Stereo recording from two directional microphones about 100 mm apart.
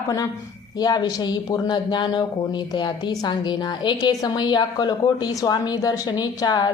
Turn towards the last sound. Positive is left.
turn(degrees=45)  # may be behind; listen again after turning